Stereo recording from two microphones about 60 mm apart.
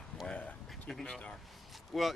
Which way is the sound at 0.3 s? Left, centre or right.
Left.